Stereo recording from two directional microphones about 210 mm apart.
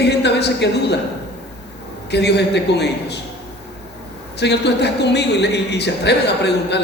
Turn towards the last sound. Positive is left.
turn(degrees=55)  # may be behind; listen again after turning